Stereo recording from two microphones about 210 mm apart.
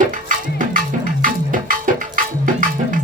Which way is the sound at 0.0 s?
40° right (ahead or behind).